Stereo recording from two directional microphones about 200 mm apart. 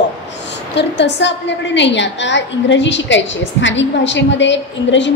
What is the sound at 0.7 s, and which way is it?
A woman's voice, 60° left (ahead or behind).